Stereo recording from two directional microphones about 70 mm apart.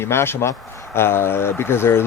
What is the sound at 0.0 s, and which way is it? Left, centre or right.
Speech, left.